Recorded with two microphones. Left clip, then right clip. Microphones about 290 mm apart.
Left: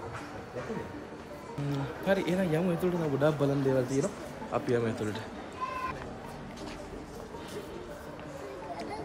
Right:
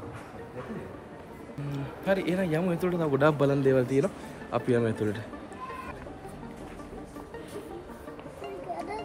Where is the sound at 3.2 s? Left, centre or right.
Right.